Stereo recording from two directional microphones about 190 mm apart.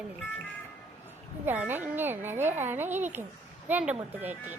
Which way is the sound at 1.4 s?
10° right (ahead or behind).